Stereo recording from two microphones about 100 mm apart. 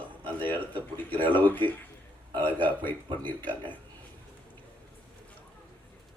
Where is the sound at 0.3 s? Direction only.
15° left (ahead or behind).